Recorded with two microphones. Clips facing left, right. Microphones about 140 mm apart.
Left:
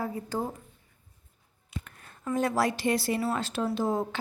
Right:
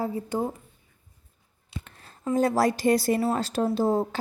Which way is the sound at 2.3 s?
35° right (ahead or behind).